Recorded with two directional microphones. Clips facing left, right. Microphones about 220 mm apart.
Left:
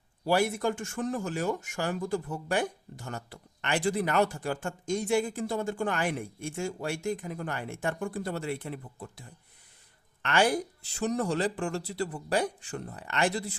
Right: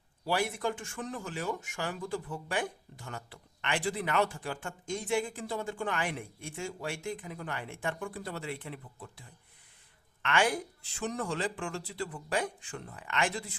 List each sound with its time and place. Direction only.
0.3 s speech: 45° left (ahead or behind)
10.2 s speech: 40° left (ahead or behind)